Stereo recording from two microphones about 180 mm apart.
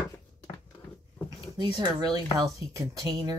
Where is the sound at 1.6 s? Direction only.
25° right (ahead or behind).